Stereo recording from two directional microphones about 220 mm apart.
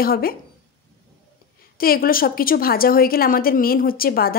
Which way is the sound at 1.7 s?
40° left (ahead or behind).